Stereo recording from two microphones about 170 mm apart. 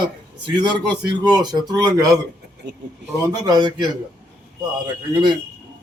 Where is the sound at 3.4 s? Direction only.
25° right (ahead or behind).